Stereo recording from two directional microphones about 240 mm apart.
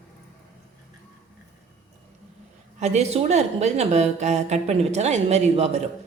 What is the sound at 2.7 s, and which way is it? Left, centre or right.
A woman's voice, right.